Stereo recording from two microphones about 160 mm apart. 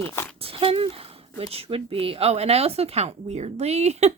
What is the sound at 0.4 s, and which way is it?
Speech, 35° right (ahead or behind).